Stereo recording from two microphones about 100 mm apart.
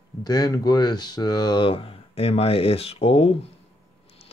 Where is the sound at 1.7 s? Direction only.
65° left (ahead or behind); by 3.3 s 85° left.